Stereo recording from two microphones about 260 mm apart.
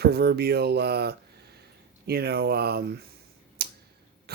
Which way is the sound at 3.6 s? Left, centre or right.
Right.